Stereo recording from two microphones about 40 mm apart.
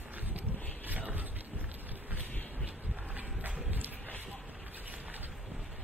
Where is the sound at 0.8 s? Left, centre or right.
Right.